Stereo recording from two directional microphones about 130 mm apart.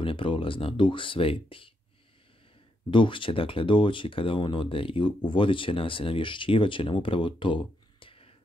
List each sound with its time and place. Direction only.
0.0 s speech: 40° left (ahead or behind)
2.9 s speech: 40° left (ahead or behind)